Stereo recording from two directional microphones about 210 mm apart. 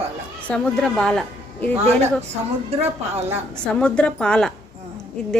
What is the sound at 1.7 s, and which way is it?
Speech, 30° right (ahead or behind).